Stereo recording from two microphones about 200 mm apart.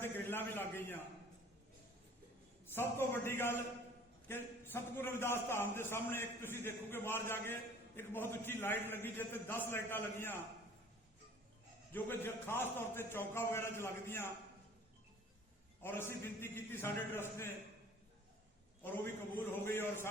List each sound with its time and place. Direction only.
0.0 s a man's voice: 10° left (ahead or behind)
2.7 s a man's voice: 10° left (ahead or behind)
11.9 s a man's voice: 10° left (ahead or behind)
15.8 s a man's voice: 10° left (ahead or behind)
18.8 s a man's voice: 10° left (ahead or behind)